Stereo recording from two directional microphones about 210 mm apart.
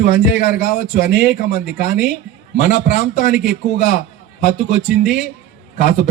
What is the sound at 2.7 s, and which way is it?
A man's voice, 35° left (ahead or behind).